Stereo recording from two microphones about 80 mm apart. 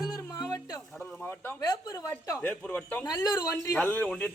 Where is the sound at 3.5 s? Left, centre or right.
Left.